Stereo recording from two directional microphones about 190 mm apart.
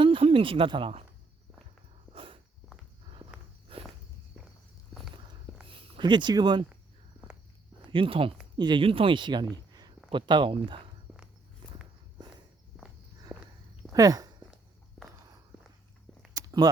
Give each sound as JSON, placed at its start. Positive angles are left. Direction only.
{"t": 0.0, "sound": "speech", "side_deg": -30}
{"t": 2.1, "sound": "walk", "side_deg": -25}
{"t": 3.7, "sound": "walk", "side_deg": -30}
{"t": 5.6, "sound": "speech", "side_deg": -30}
{"t": 7.9, "sound": "speech", "side_deg": -25}
{"t": 11.1, "sound": "walk", "side_deg": -10}
{"t": 11.6, "sound": "walk", "side_deg": -25}
{"t": 13.3, "sound": "walk", "side_deg": -5}
{"t": 13.9, "sound": "a sound", "side_deg": -20}
{"t": 16.3, "sound": "a sound", "side_deg": -20}